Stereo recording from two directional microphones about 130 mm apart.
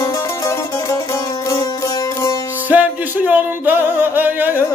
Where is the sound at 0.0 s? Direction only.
25° left (ahead or behind).